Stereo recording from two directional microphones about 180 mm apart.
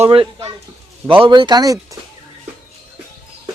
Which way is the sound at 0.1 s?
30° right (ahead or behind).